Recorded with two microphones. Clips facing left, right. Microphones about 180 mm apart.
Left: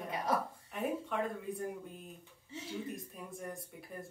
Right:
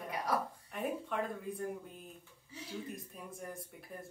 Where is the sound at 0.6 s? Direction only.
Centre (ahead or behind).